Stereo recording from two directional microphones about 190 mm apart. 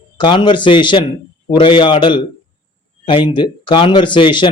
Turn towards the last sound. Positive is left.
turn(degrees=25)  # may be behind; listen again after turning